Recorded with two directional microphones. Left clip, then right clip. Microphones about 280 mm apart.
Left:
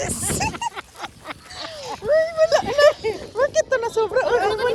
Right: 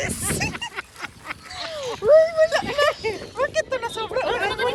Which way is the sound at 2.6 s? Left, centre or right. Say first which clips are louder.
Left 5 dB; left.